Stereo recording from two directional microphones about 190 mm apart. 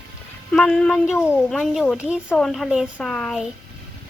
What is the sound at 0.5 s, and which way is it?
A woman's voice, 5° left (ahead or behind).